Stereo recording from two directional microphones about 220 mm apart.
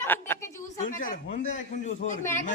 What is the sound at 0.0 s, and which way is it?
Speech, 10° left (ahead or behind).